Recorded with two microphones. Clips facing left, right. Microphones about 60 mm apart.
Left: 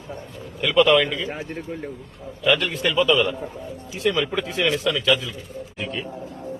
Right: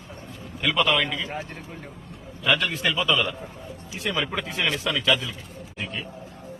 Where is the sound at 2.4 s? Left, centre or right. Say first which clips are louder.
Left 3 dB; centre.